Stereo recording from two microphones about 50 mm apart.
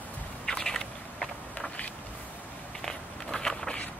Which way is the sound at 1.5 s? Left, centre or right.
Left.